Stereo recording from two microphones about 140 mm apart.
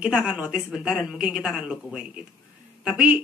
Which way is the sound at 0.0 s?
10° right (ahead or behind).